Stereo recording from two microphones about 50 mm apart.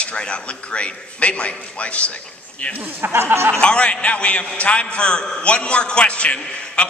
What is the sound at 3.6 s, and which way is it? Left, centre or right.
A man's voice, left.